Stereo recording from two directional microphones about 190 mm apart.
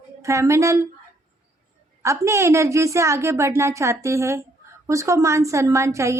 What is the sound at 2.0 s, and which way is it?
A woman's voice, 15° right (ahead or behind).